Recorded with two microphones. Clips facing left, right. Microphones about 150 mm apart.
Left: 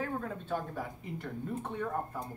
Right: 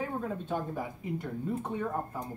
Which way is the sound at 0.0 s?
10° right (ahead or behind).